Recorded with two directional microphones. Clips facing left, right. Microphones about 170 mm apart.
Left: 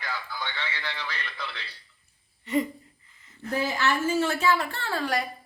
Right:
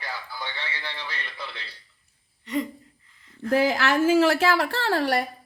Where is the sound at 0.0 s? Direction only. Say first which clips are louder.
Left 1 dB; 10° right (ahead or behind).